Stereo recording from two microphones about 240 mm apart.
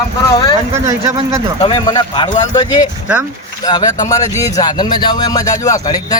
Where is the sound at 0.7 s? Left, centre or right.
Centre.